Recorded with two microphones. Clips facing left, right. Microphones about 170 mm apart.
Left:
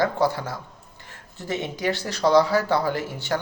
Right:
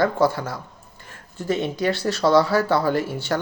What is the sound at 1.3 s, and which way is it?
Speech, 20° left (ahead or behind).